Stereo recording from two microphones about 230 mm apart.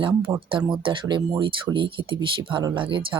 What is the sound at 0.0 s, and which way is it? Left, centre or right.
Speech, right.